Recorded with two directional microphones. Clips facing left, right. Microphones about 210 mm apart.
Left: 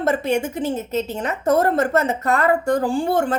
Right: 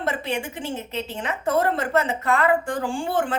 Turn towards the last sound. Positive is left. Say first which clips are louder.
# left 5 dB
turn(degrees=40)  # may be behind; listen again after turning